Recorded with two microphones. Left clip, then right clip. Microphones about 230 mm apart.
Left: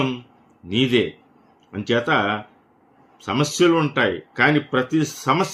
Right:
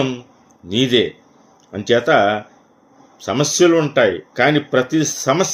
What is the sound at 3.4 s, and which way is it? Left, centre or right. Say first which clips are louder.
Speech: right 4 dB; centre.